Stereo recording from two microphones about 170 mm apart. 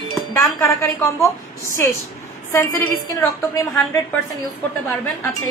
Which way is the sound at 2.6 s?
20° left (ahead or behind).